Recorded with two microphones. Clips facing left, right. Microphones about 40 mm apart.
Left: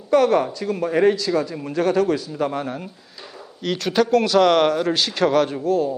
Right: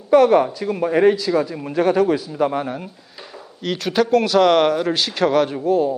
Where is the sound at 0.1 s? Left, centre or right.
Centre.